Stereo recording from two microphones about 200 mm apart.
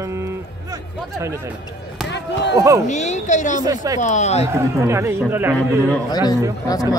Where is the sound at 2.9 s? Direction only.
35° left (ahead or behind).